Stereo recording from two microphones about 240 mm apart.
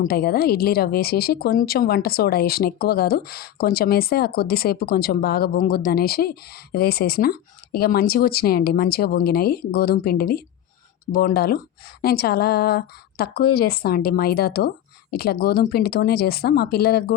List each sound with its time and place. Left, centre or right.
0.0 s a woman's voice: left